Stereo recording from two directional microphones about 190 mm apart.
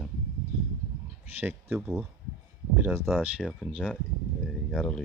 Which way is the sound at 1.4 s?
10° right (ahead or behind).